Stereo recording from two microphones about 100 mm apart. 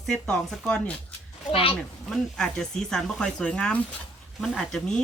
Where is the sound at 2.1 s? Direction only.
5° left (ahead or behind).